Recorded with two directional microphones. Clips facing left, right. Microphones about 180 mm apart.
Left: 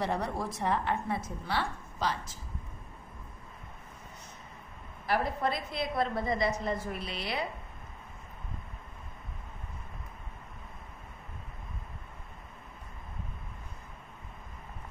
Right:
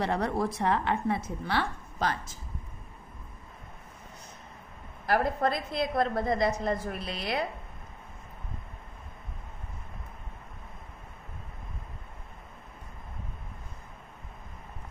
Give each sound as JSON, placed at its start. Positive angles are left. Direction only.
{"t": 0.0, "sound": "a woman's voice", "side_deg": -65}
{"t": 5.0, "sound": "a woman's voice", "side_deg": -45}